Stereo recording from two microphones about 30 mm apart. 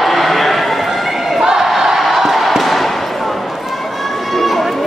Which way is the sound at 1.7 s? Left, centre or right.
Centre.